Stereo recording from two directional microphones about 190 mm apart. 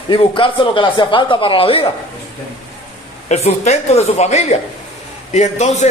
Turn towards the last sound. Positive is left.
turn(degrees=35)  # may be behind; listen again after turning